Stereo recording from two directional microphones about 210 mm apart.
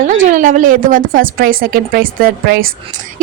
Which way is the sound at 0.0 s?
35° right (ahead or behind).